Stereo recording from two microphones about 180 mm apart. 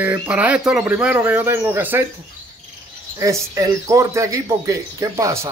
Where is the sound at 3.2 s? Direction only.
20° right (ahead or behind).